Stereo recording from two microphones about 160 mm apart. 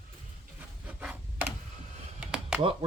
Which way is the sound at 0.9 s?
10° right (ahead or behind).